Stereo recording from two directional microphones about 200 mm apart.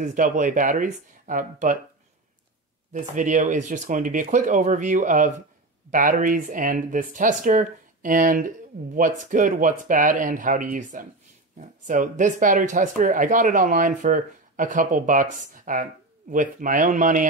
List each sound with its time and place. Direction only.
0.0 s speech: 40° right (ahead or behind)
2.9 s speech: 40° right (ahead or behind)